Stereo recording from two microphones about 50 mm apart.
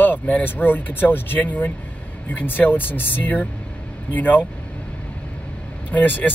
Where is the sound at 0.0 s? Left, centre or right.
Left.